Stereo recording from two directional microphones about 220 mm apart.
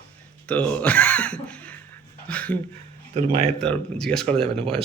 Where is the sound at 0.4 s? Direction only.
5° left (ahead or behind).